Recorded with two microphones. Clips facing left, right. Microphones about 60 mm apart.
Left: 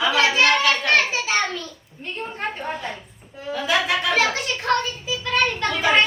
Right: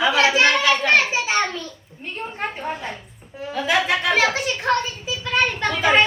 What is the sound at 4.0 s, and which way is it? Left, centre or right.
A child's voice, centre.